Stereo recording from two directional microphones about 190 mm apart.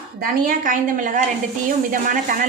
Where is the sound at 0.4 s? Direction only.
45° right (ahead or behind).